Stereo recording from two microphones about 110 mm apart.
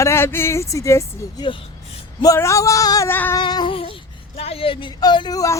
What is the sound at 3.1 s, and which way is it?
Speech, 20° left (ahead or behind).